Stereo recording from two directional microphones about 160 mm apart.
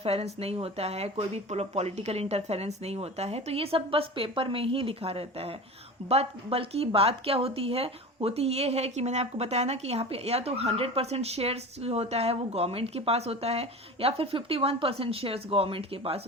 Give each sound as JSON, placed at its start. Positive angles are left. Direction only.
{"t": 0.0, "sound": "a woman's voice", "side_deg": -40}